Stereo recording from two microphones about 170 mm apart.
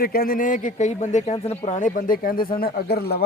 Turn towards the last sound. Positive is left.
turn(degrees=70)  # may be behind; listen again after turning